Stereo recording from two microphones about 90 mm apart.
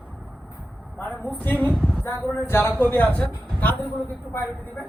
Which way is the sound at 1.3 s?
20° left (ahead or behind).